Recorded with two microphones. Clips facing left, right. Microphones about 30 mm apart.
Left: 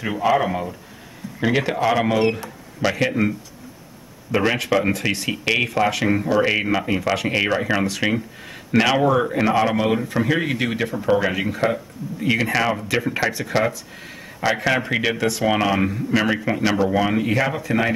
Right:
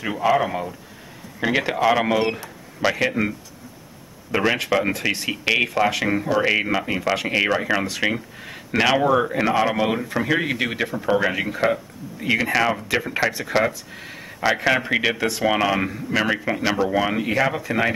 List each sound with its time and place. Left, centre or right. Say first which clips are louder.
0.0 s speech: left 1 dB; centre
4.5 s speech: even; centre